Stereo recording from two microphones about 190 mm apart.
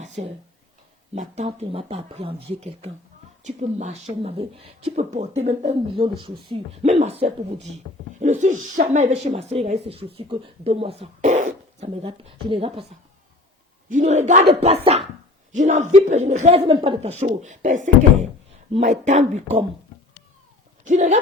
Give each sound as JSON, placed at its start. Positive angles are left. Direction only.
{"t": 1.1, "sound": "speech", "side_deg": -35}
{"t": 13.9, "sound": "speech", "side_deg": -35}
{"t": 20.8, "sound": "speech", "side_deg": -40}